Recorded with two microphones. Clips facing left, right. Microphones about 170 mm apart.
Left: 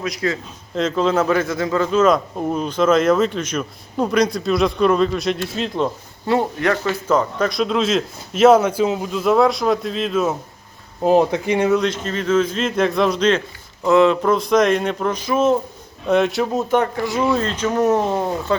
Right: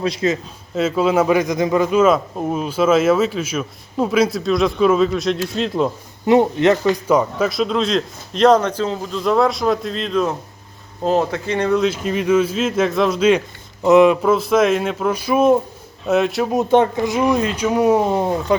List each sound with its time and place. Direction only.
0.0 s a man's voice: 25° right (ahead or behind)
0.8 s speech: 10° right (ahead or behind)
6.2 s speech: 20° right (ahead or behind); by 10.3 s 5° left (ahead or behind)
11.0 s speech: 15° left (ahead or behind); by 15.5 s 10° right (ahead or behind)
16.0 s speech: centre (ahead or behind)
16.5 s speech: 20° right (ahead or behind)